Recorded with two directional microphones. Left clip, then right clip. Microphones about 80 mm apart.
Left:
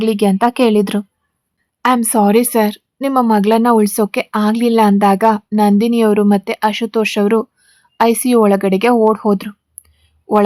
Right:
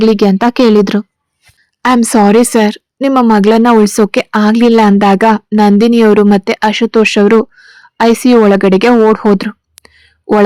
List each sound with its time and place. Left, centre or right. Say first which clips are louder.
0.0 s speech: right 5 dB; right
2.0 s speech: right 5 dB; right
9.0 s a sound: right 5 dB; right